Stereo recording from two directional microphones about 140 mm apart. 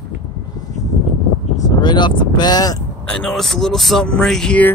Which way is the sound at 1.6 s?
30° left (ahead or behind).